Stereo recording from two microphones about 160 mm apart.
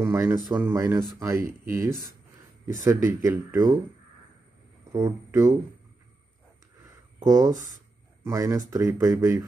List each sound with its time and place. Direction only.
0.0 s speech: 15° right (ahead or behind)
4.9 s speech: 20° right (ahead or behind)
7.2 s speech: 20° right (ahead or behind)